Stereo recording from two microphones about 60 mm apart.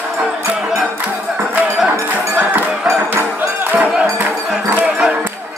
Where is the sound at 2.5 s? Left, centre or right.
Right.